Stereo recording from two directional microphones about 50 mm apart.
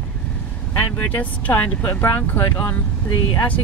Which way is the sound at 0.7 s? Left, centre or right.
Left.